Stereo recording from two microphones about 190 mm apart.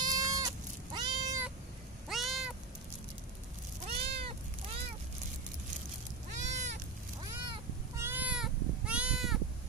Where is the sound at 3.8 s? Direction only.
30° right (ahead or behind).